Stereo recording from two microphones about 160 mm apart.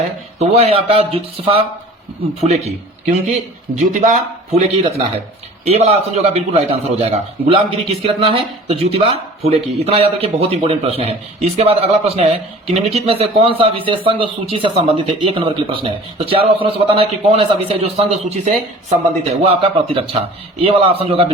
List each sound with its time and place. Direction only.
0.3 s a man's voice: 45° right (ahead or behind)